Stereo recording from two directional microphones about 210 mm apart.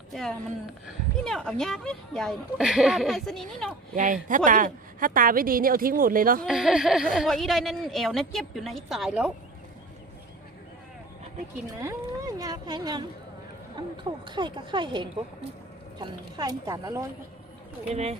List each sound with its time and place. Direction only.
0.1 s speech: centre (ahead or behind)
3.9 s a woman's voice: 40° right (ahead or behind)
6.4 s speech: centre (ahead or behind)
11.8 s speech: 15° right (ahead or behind)
17.9 s a woman's voice: 30° right (ahead or behind)